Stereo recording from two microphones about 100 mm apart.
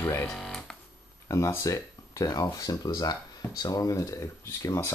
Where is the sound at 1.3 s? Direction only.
30° left (ahead or behind).